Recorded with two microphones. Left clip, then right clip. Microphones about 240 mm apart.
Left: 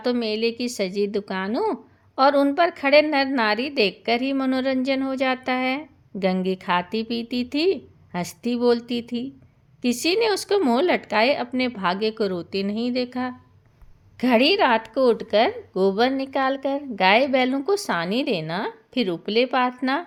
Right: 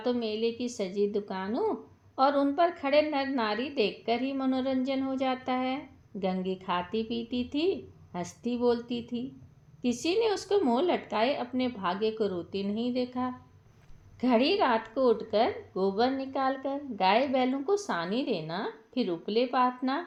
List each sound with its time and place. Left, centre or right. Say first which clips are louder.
0.0 s speech: left 6 dB; left